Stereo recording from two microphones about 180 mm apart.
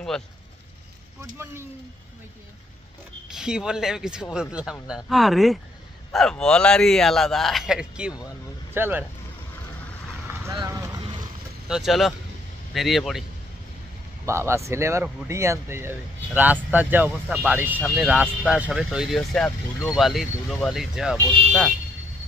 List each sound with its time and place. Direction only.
1.4 s speech: 15° right (ahead or behind)
3.3 s speech: 5° right (ahead or behind)
10.5 s speech: 20° right (ahead or behind)
11.7 s speech: centre (ahead or behind)
14.2 s speech: 15° right (ahead or behind)